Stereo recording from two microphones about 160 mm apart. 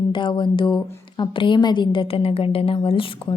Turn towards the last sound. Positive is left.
turn(degrees=30)  # may be behind; listen again after turning